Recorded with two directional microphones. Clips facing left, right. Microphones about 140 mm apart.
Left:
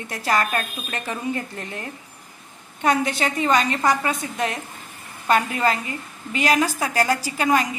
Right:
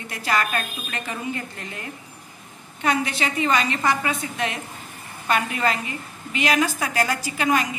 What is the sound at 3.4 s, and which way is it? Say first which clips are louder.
Speech: left 2 dB; 40° left (ahead or behind).